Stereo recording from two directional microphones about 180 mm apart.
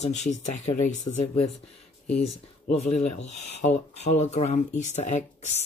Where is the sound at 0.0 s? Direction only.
40° left (ahead or behind).